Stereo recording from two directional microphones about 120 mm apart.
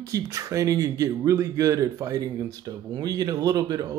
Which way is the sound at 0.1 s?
25° right (ahead or behind).